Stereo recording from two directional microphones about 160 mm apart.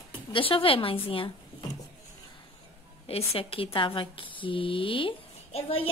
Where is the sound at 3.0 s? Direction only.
35° left (ahead or behind).